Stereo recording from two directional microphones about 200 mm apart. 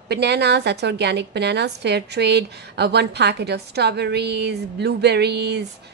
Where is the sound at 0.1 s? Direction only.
55° right (ahead or behind).